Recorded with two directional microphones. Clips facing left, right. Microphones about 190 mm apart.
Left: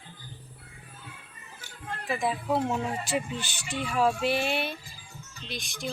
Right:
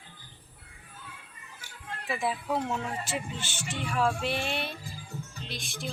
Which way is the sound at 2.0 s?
5° right (ahead or behind).